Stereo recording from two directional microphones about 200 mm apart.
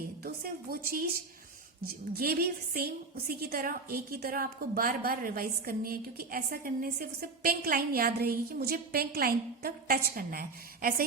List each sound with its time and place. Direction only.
0.9 s a woman's voice: 50° right (ahead or behind)